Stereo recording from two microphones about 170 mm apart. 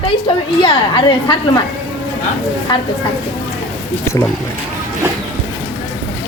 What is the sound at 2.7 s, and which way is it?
Speech, 25° left (ahead or behind).